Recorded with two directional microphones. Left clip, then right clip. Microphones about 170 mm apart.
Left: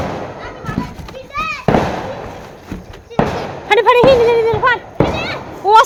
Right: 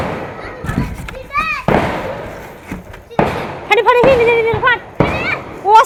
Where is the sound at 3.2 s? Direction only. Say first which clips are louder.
Right 2 dB; 65° right (ahead or behind).